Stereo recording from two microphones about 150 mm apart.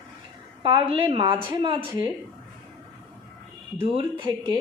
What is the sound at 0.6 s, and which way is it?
Speech, 35° right (ahead or behind).